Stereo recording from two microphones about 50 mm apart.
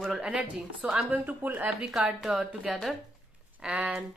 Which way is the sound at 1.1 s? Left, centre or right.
Right.